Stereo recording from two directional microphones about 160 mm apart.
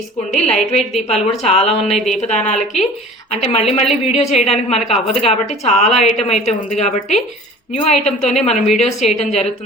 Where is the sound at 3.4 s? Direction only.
40° left (ahead or behind).